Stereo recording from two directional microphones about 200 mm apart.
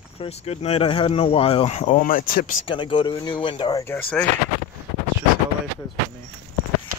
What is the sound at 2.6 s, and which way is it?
Speech, 25° left (ahead or behind).